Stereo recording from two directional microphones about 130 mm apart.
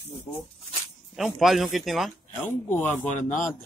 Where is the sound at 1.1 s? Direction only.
Centre (ahead or behind).